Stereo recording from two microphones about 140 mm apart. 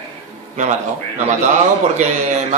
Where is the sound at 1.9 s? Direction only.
55° right (ahead or behind).